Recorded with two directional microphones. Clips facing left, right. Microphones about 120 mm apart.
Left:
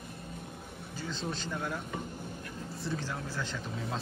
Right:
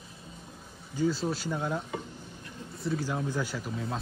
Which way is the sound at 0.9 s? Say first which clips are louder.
Right 9 dB; 10° right (ahead or behind).